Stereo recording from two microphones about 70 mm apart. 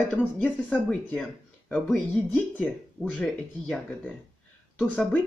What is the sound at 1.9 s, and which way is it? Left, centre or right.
Speech, centre.